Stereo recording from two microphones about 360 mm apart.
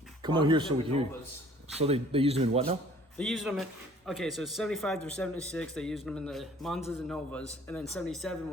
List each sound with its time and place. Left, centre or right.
0.2 s speech: centre
3.2 s speech: centre